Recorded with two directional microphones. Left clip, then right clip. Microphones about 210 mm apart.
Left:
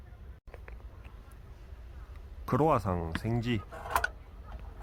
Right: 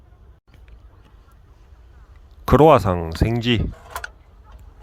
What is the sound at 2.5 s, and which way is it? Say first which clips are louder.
Speech: right 15 dB; 40° right (ahead or behind).